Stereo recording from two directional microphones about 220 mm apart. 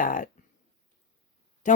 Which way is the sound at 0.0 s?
40° left (ahead or behind).